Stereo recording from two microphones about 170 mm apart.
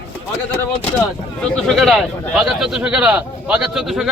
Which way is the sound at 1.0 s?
Centre (ahead or behind).